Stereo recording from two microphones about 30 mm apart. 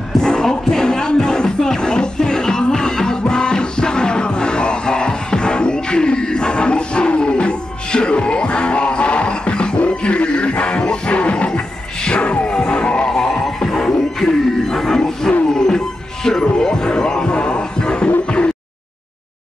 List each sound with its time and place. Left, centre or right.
0.2 s music: left
13.1 s neigh: left
13.7 s music: centre; by 18.1 s left